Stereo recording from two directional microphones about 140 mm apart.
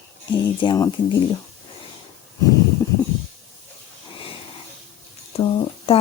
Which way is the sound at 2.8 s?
20° left (ahead or behind).